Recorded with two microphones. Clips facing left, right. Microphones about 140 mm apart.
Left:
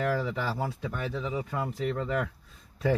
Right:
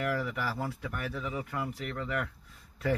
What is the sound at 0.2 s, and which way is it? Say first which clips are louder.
Speech: left 3 dB; 25° left (ahead or behind).